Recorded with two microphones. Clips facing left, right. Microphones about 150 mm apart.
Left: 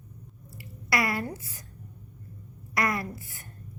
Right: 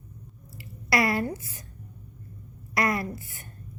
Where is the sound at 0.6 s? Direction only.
25° right (ahead or behind).